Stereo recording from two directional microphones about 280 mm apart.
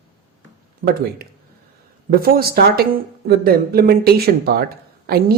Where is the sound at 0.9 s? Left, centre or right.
Right.